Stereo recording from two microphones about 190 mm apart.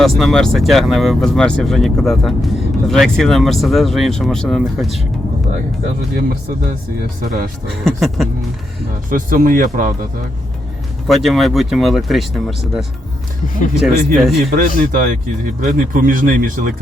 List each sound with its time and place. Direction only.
0.0 s speech: centre (ahead or behind)
7.9 s speech: centre (ahead or behind)
9.0 s speech: 45° right (ahead or behind)
11.1 s speech: centre (ahead or behind)
13.8 s speech: centre (ahead or behind)
14.8 s speech: 45° right (ahead or behind)